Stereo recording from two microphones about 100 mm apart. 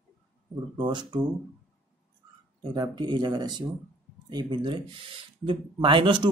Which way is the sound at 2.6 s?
40° right (ahead or behind).